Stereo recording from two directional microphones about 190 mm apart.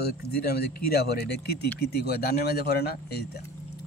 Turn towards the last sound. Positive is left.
turn(degrees=55)  # may be behind; listen again after turning